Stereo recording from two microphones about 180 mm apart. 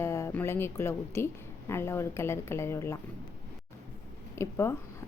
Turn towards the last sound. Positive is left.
turn(degrees=15)  # may be behind; listen again after turning